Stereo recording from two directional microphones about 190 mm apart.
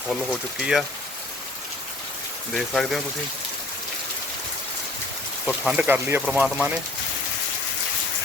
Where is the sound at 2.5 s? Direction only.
Centre (ahead or behind).